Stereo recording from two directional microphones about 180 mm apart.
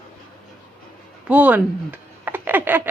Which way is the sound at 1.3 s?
10° right (ahead or behind).